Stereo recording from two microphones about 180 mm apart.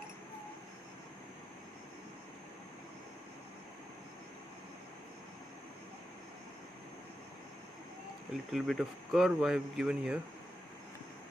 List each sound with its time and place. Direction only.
8.5 s speech: centre (ahead or behind)